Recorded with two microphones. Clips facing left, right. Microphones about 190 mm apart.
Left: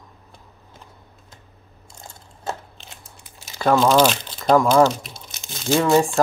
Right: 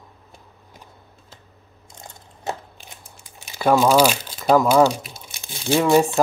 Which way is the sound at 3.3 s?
15° right (ahead or behind).